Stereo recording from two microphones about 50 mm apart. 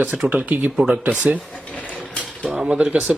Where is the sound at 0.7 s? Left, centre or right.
Centre.